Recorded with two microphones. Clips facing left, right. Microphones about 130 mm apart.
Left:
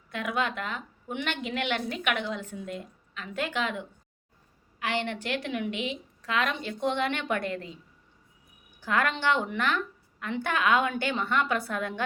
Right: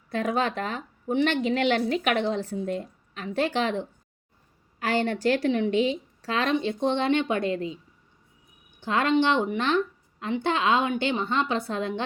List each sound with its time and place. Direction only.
0.1 s a woman's voice: 35° right (ahead or behind); by 7.8 s 20° right (ahead or behind)
8.8 s a woman's voice: 25° right (ahead or behind)